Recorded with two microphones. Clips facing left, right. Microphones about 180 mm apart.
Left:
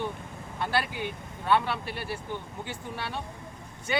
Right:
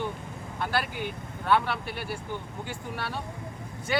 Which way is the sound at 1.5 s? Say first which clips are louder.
Even; centre (ahead or behind).